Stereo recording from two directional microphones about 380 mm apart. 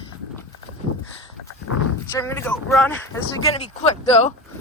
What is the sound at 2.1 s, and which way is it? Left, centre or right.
Speech, centre.